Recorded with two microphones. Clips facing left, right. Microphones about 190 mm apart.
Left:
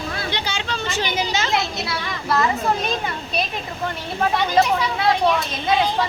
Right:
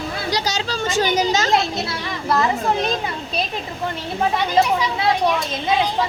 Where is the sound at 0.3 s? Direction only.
40° right (ahead or behind).